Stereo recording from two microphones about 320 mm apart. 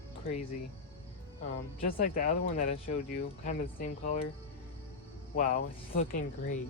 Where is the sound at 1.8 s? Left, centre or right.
Left.